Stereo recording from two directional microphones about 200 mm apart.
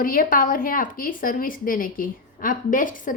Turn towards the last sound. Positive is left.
turn(degrees=40)  # may be behind; listen again after turning